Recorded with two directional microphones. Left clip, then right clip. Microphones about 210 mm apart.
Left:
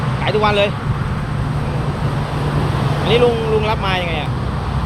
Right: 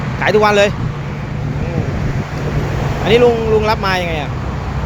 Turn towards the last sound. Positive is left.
turn(degrees=-30)  # may be behind; listen again after turning